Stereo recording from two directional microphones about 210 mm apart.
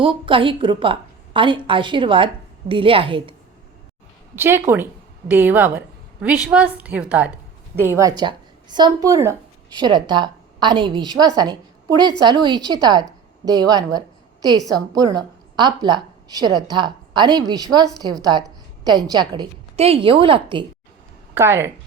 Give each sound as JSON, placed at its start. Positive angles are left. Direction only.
{"t": 0.0, "sound": "a woman's voice", "side_deg": -25}
{"t": 4.4, "sound": "a woman's voice", "side_deg": -10}
{"t": 21.3, "sound": "a woman's voice", "side_deg": -10}